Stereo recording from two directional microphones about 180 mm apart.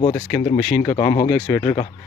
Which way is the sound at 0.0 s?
25° left (ahead or behind).